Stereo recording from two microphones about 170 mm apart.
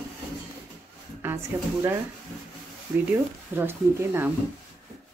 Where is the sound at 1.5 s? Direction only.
15° right (ahead or behind).